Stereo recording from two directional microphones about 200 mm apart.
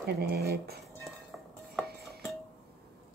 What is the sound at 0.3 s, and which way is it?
Speech, 50° right (ahead or behind).